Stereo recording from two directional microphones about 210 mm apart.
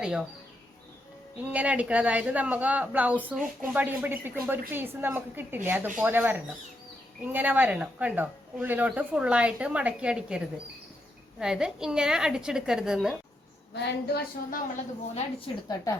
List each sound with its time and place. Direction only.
0.0 s a woman's voice: 5° right (ahead or behind)
1.5 s a woman's voice: 5° right (ahead or behind)
13.7 s a woman's voice: 50° left (ahead or behind)
15.7 s a woman's voice: 15° left (ahead or behind)